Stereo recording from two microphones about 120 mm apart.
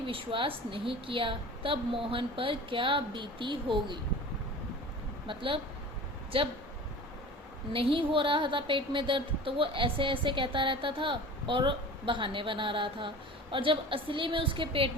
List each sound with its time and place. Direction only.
0.0 s a woman's voice: 45° right (ahead or behind)
5.2 s a woman's voice: 45° right (ahead or behind)
7.7 s a woman's voice: 50° right (ahead or behind)